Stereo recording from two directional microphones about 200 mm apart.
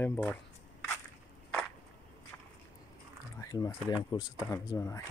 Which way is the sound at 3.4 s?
15° left (ahead or behind).